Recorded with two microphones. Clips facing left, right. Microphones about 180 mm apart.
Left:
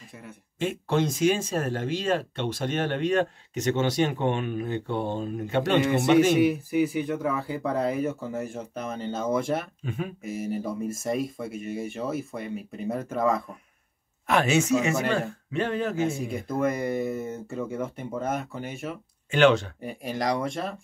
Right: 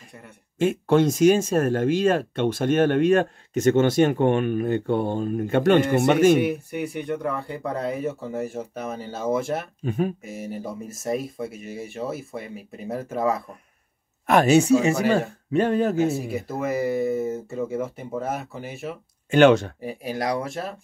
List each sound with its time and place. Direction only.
0.1 s speech: centre (ahead or behind)
0.6 s speech: 50° right (ahead or behind)
6.4 s speech: centre (ahead or behind)
9.8 s speech: 40° right (ahead or behind)
10.2 s speech: centre (ahead or behind)
14.2 s speech: 40° right (ahead or behind)
16.1 s speech: 5° right (ahead or behind)
19.3 s speech: 45° right (ahead or behind)
19.8 s speech: centre (ahead or behind)